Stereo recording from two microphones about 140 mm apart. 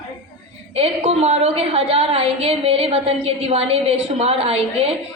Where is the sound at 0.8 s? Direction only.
50° right (ahead or behind).